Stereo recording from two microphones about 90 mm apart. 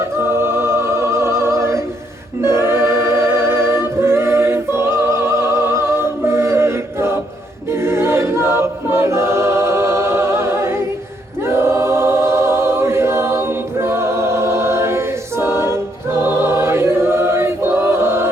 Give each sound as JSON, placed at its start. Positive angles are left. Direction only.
{"t": 0.2, "sound": "music", "side_deg": -30}
{"t": 2.4, "sound": "choir", "side_deg": -30}